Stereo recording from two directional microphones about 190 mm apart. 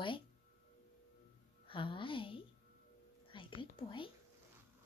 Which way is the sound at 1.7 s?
25° left (ahead or behind).